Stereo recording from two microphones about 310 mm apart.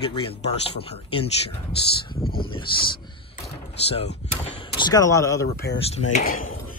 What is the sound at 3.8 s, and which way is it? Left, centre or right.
Speech, centre.